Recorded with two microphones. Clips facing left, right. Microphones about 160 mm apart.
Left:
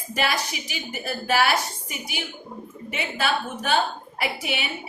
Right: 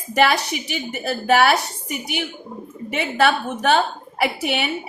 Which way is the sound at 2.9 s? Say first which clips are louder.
Right 7 dB; 70° right (ahead or behind).